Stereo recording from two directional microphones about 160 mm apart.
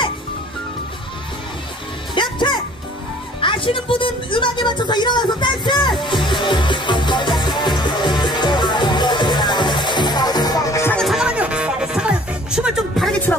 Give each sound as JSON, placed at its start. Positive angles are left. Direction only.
{"t": 2.1, "sound": "music", "side_deg": 30}
{"t": 11.0, "sound": "music", "side_deg": -5}